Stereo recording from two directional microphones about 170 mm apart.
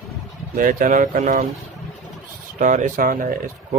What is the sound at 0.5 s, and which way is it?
Speech, 50° right (ahead or behind).